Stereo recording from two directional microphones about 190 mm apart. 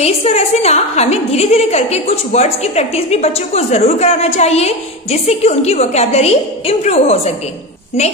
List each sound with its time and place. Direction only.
0.0 s a woman's voice: 35° left (ahead or behind)